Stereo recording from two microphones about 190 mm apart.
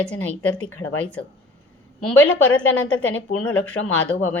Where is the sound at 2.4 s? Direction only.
90° left.